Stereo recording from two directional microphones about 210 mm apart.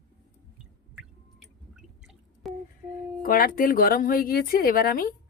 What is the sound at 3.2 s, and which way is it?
Speech, 45° left (ahead or behind).